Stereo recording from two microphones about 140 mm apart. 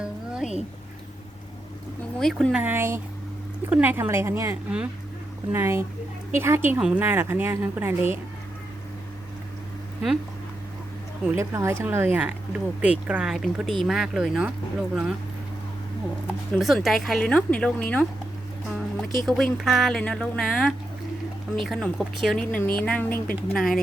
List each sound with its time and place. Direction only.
0.0 s music: 5° right (ahead or behind)
2.1 s speech: centre (ahead or behind)
2.6 s speech: 15° right (ahead or behind)
11.3 s speech: 20° right (ahead or behind)
16.6 s speech: centre (ahead or behind)